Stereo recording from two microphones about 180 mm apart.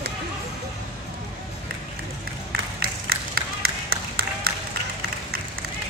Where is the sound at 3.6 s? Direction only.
60° right (ahead or behind).